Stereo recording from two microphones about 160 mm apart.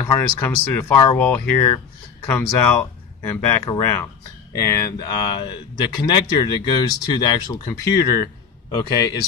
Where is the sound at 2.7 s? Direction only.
15° left (ahead or behind).